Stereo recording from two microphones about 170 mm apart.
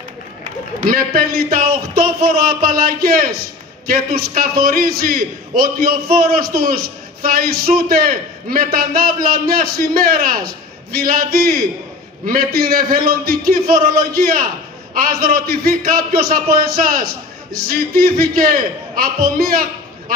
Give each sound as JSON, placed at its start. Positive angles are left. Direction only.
{"t": 0.7, "sound": "a man's voice", "side_deg": -55}